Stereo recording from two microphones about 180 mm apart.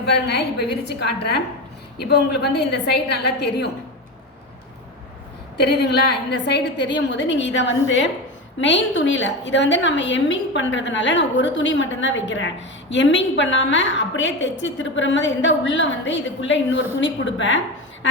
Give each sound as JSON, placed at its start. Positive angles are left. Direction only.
{"t": 0.0, "sound": "a woman's voice", "side_deg": 65}
{"t": 5.5, "sound": "a woman's voice", "side_deg": 65}